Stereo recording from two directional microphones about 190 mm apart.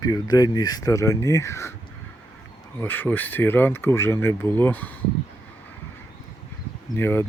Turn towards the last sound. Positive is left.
turn(degrees=10)  # may be behind; listen again after turning